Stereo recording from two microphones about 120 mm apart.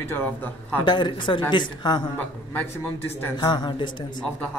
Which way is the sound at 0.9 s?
40° left (ahead or behind).